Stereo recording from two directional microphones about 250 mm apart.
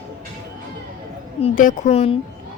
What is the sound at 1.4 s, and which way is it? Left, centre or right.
Speech, left.